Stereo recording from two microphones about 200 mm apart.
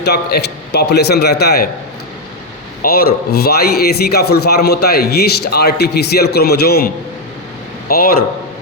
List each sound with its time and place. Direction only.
0.0 s a man's voice: 55° left (ahead or behind)
2.8 s a man's voice: 50° left (ahead or behind)